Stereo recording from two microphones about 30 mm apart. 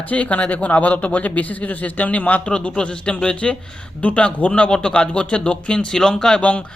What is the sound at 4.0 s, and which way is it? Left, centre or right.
Speech, left.